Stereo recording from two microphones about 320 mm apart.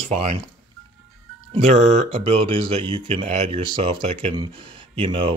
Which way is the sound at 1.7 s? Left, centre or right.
Right.